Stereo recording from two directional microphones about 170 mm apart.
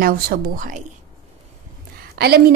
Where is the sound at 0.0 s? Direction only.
55° right (ahead or behind).